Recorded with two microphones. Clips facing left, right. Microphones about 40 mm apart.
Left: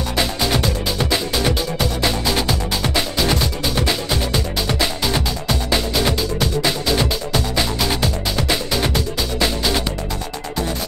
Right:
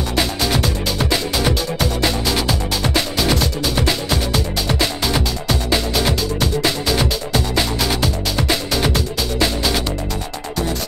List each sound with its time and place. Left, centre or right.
0.1 s music: centre